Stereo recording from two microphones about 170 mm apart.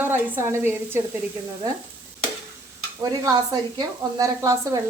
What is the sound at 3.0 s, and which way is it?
Speech, 20° right (ahead or behind).